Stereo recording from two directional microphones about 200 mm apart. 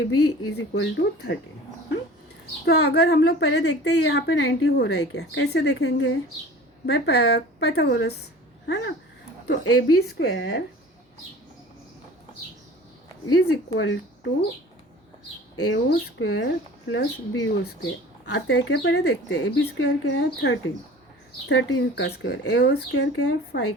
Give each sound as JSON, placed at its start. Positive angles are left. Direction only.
{"t": 0.0, "sound": "speech", "side_deg": 90}
{"t": 2.6, "sound": "a woman's voice", "side_deg": 55}
{"t": 9.5, "sound": "speech", "side_deg": 90}
{"t": 10.0, "sound": "a woman's voice", "side_deg": 60}
{"t": 13.3, "sound": "speech", "side_deg": 90}
{"t": 15.5, "sound": "speech", "side_deg": 90}
{"t": 16.1, "sound": "speech", "side_deg": 75}
{"t": 16.9, "sound": "a woman's voice", "side_deg": 65}
{"t": 22.9, "sound": "speech", "side_deg": 75}
{"t": 23.5, "sound": "a woman's voice", "side_deg": 65}